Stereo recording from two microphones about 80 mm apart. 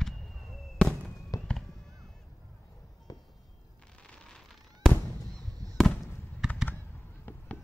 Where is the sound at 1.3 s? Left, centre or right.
Left.